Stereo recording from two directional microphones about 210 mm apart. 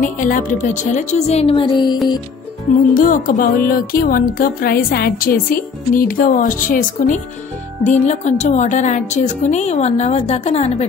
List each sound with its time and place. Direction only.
0.0 s speech: 40° left (ahead or behind); by 2.0 s 20° left (ahead or behind)
2.9 s speech: 40° left (ahead or behind)